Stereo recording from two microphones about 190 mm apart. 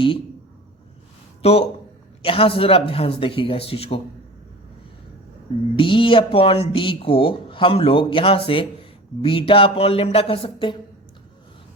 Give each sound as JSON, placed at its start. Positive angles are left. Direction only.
{"t": 1.4, "sound": "speech", "side_deg": 30}
{"t": 5.7, "sound": "speech", "side_deg": 25}